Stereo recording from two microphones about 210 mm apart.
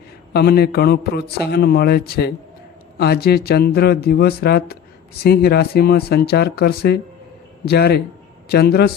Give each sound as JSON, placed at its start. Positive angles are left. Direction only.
{"t": 0.3, "sound": "a man's voice", "side_deg": 50}